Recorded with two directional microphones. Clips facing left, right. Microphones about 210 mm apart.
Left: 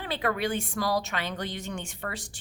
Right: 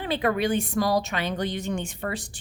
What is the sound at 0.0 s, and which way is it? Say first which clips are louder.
A woman's voice: right 5 dB; 20° right (ahead or behind).